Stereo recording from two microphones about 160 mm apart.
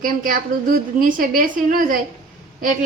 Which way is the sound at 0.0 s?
60° right (ahead or behind).